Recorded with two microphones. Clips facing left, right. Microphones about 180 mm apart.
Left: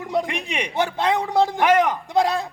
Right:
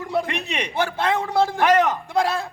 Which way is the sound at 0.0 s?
20° left (ahead or behind).